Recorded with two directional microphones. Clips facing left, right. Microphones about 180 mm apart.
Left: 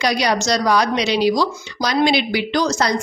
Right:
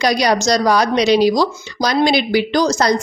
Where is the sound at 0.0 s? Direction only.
40° right (ahead or behind).